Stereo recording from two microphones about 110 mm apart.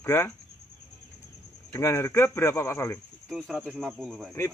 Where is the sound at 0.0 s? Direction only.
20° left (ahead or behind).